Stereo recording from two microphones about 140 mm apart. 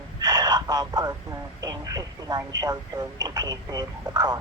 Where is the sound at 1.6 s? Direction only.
25° right (ahead or behind).